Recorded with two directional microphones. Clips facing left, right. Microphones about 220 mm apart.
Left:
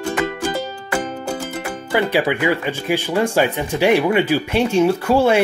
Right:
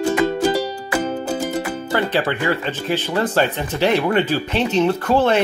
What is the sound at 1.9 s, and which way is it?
Speech, 10° left (ahead or behind).